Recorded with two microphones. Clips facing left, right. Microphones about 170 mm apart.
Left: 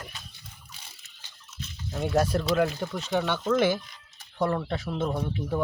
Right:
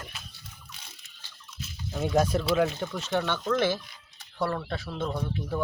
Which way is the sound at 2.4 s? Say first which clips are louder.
Even; centre (ahead or behind).